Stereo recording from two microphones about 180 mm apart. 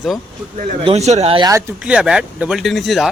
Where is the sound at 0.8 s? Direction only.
35° right (ahead or behind).